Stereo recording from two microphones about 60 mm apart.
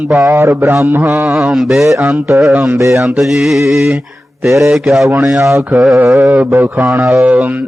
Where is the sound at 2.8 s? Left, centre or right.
Right.